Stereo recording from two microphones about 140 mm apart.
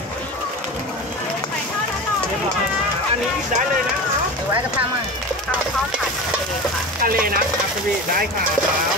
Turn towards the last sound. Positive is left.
turn(degrees=-90)